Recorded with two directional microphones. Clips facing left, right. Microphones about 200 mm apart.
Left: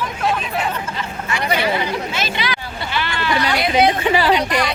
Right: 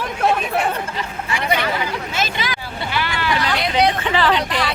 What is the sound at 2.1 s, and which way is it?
Speech, 45° right (ahead or behind).